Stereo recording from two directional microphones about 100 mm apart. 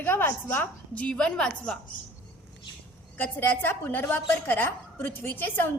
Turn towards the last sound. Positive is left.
turn(degrees=20)  # may be behind; listen again after turning